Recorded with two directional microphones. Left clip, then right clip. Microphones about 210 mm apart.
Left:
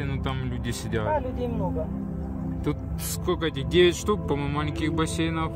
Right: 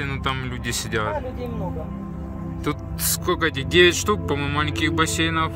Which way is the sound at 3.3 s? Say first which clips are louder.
Right 5 dB; 5° left (ahead or behind).